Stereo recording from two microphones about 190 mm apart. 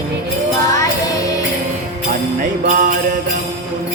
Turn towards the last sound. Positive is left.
turn(degrees=-45)  # may be behind; listen again after turning